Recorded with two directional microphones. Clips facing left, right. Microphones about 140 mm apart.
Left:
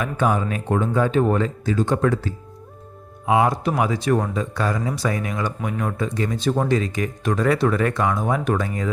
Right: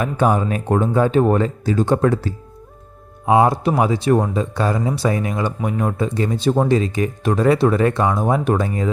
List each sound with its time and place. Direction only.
0.0 s speech: 35° right (ahead or behind)